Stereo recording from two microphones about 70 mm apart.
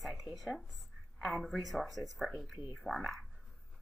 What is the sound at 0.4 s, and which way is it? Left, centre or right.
A woman's voice, centre.